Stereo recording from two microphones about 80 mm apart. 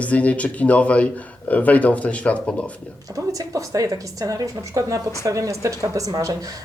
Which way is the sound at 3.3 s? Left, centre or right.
Right.